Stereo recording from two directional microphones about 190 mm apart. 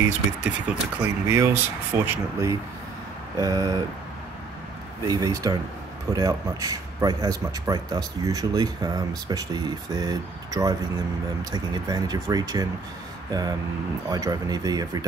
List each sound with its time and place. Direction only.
0.0 s speech: 5° right (ahead or behind)
5.0 s a man's voice: 20° right (ahead or behind)